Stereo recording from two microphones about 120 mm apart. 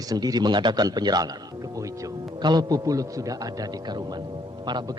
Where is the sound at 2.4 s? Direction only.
35° right (ahead or behind).